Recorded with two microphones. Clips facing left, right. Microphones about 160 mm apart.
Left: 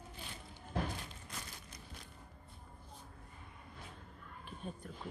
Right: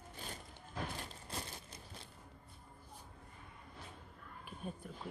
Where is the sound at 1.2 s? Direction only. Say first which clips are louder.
Right 3 dB; 30° right (ahead or behind).